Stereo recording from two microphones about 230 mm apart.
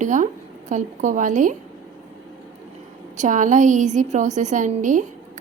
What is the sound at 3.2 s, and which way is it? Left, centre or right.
A woman's voice, right.